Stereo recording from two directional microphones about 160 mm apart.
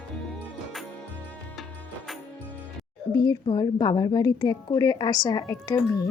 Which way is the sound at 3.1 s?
25° left (ahead or behind).